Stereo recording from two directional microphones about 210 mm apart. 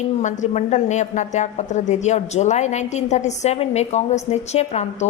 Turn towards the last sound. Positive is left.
turn(degrees=30)  # may be behind; listen again after turning